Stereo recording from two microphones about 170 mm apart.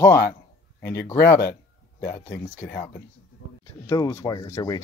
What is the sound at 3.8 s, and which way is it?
Speech, 20° left (ahead or behind).